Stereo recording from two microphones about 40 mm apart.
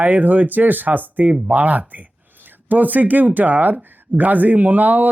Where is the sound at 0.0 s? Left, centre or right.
Right.